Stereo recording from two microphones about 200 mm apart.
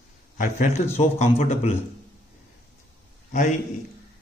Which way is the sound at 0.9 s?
35° left (ahead or behind).